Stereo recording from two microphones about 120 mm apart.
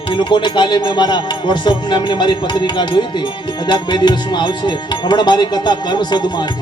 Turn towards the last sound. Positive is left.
turn(degrees=35)  # may be behind; listen again after turning